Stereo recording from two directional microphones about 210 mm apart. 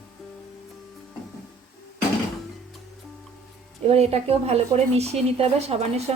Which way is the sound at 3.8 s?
30° right (ahead or behind).